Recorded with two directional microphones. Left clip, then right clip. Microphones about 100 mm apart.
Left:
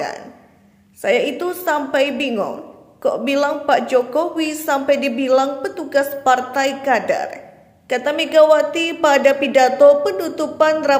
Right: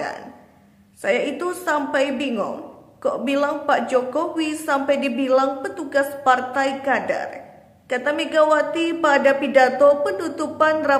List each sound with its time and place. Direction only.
1.0 s a man's voice: 25° left (ahead or behind)